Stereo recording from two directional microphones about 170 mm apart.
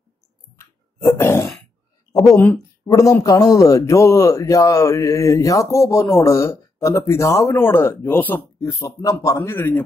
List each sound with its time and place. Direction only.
0.6 s a sound: 15° left (ahead or behind)
2.3 s speech: 10° left (ahead or behind)
2.9 s a man's voice: 20° left (ahead or behind)